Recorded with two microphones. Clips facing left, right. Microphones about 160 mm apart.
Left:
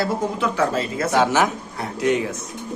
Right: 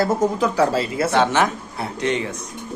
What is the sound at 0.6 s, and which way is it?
Speech, 30° right (ahead or behind).